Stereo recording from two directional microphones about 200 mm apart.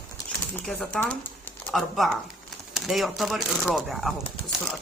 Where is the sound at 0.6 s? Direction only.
5° left (ahead or behind).